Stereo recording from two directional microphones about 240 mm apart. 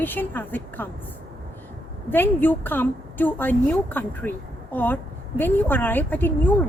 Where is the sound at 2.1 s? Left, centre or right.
Centre.